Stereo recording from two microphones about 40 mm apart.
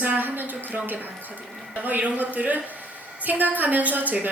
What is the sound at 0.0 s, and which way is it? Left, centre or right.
A woman's voice, right.